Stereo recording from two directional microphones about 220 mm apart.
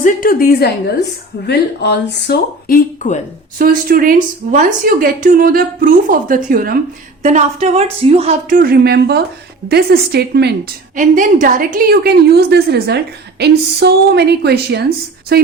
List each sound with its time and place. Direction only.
0.0 s a woman's voice: 40° left (ahead or behind)
3.6 s a woman's voice: 40° right (ahead or behind)
10.9 s a woman's voice: 35° right (ahead or behind)